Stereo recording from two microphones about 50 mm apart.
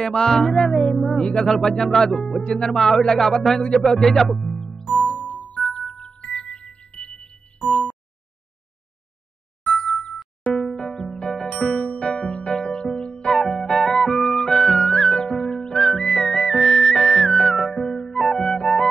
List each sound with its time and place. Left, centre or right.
0.0 s speech: centre
5.2 s music: left
5.7 s chime: centre
9.7 s ding: centre
10.1 s music: centre
13.3 s music: centre